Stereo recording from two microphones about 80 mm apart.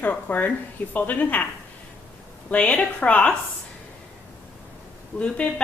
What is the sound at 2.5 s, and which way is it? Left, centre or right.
Speech, centre.